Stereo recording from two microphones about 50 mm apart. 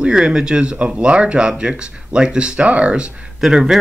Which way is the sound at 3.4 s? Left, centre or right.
Centre.